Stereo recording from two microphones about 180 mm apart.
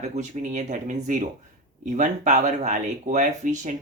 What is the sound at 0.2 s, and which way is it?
Speech, 40° right (ahead or behind).